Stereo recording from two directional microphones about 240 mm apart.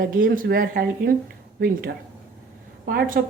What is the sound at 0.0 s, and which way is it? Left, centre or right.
A woman's voice, right.